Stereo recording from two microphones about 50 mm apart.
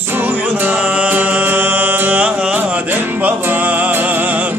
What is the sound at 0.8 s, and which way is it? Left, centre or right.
Music, right.